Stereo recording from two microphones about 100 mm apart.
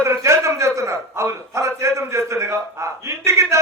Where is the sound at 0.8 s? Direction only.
30° right (ahead or behind).